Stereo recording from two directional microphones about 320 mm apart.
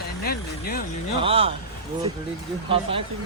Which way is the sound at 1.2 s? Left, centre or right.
Centre.